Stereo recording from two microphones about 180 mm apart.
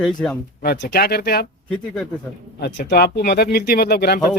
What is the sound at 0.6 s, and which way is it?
Speech, 60° left (ahead or behind).